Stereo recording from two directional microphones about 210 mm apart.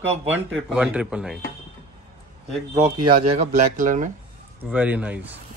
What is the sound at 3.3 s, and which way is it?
Speech, 35° right (ahead or behind).